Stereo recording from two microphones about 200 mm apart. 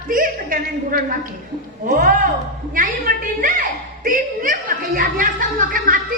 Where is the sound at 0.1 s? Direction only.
45° right (ahead or behind).